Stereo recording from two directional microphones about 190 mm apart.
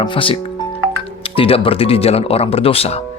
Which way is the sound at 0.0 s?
25° left (ahead or behind).